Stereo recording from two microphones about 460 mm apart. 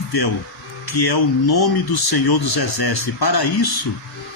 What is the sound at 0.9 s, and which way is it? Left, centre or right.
Speech, left.